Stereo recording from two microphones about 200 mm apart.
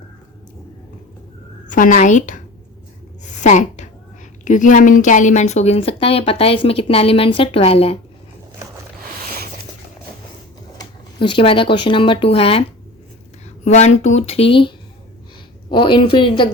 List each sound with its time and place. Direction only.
1.6 s a woman's voice: 40° left (ahead or behind)
3.4 s a woman's voice: 40° left (ahead or behind)
10.8 s speech: 25° left (ahead or behind)
13.7 s speech: 35° left (ahead or behind)
15.7 s speech: 25° left (ahead or behind)